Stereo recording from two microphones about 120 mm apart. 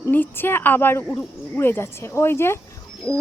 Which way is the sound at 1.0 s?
5° left (ahead or behind).